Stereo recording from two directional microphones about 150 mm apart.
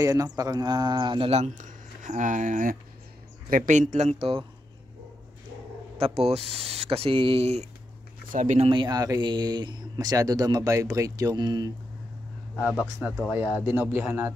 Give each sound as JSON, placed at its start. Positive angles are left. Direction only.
{"t": 0.0, "sound": "speech", "side_deg": -20}
{"t": 1.3, "sound": "speech", "side_deg": -55}
{"t": 4.2, "sound": "speech", "side_deg": -40}
{"t": 5.9, "sound": "speech", "side_deg": -40}
{"t": 8.3, "sound": "speech", "side_deg": -55}
{"t": 8.6, "sound": "speech", "side_deg": -30}
{"t": 12.5, "sound": "speech", "side_deg": -5}